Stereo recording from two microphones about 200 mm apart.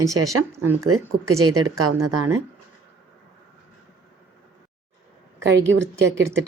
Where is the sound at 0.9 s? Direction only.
90° right.